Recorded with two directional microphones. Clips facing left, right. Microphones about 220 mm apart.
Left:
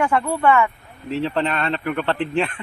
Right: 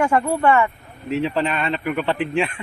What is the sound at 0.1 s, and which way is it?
Speech, 10° right (ahead or behind).